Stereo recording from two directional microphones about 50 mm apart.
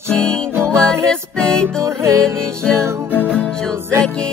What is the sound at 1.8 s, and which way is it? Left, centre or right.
Music, right.